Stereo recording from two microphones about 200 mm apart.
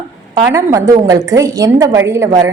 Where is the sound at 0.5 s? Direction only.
15° right (ahead or behind).